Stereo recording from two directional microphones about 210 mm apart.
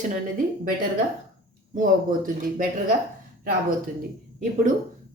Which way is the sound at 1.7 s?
40° right (ahead or behind).